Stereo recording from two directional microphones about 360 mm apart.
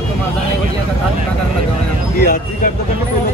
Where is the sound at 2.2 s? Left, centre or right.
Left.